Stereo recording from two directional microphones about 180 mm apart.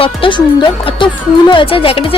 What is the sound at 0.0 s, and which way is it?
Speech, 30° left (ahead or behind).